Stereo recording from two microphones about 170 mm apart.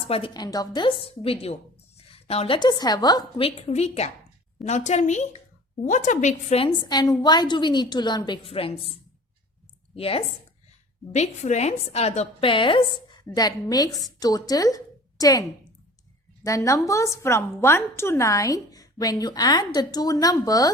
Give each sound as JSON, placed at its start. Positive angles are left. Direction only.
{"t": 0.1, "sound": "a woman's voice", "side_deg": 25}
{"t": 6.8, "sound": "a woman's voice", "side_deg": 25}
{"t": 9.9, "sound": "a woman's voice", "side_deg": 35}